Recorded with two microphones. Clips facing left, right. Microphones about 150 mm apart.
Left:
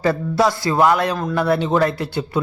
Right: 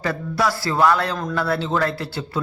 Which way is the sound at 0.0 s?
25° left (ahead or behind).